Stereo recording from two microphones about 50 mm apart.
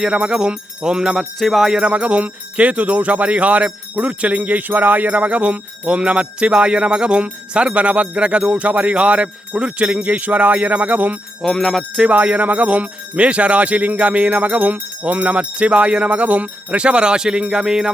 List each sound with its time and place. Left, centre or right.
0.0 s music: right
1.4 s jingle bell: centre
1.7 s jingle bell: right
11.4 s jingle bell: centre
12.0 s jingle bell: right; by 17.9 s centre